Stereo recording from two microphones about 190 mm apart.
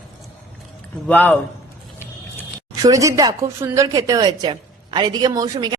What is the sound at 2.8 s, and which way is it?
A woman's voice, 15° right (ahead or behind).